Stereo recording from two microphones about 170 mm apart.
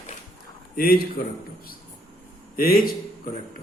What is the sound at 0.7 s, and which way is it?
Speech, 60° left (ahead or behind).